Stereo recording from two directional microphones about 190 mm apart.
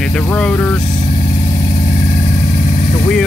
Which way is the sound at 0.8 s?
40° left (ahead or behind).